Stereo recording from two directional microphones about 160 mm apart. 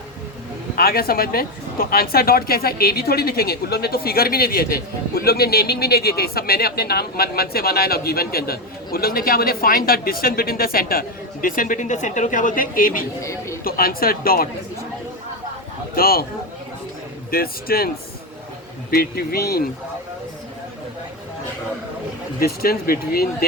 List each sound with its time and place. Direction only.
0.8 s speech: 70° left (ahead or behind)
16.0 s speech: 70° left (ahead or behind)
17.3 s speech: 70° left (ahead or behind)
22.4 s speech: 70° left (ahead or behind)